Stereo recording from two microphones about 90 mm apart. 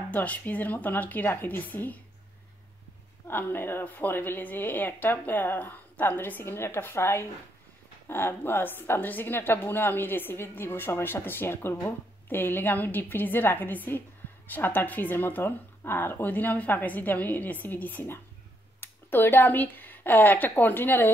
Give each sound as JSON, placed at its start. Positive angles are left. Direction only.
{"t": 0.1, "sound": "a woman's voice", "side_deg": 15}
{"t": 3.3, "sound": "a woman's voice", "side_deg": 25}